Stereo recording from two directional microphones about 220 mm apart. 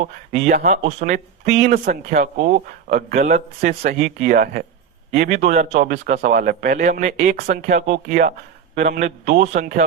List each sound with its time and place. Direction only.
0.0 s speech: 35° right (ahead or behind)
0.7 s speech: 30° right (ahead or behind)